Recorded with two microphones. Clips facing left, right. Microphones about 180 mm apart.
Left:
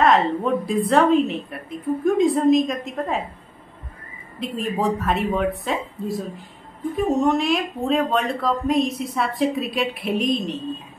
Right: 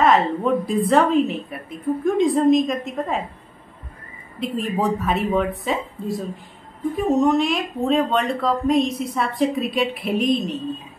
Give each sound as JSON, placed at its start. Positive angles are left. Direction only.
{"t": 0.0, "sound": "speech", "side_deg": 0}
{"t": 4.4, "sound": "speech", "side_deg": 0}